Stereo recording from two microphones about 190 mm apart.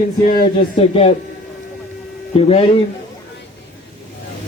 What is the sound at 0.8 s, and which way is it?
Speech, 30° left (ahead or behind).